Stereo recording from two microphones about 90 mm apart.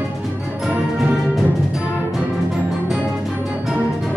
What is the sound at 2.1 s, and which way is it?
Music, 5° right (ahead or behind).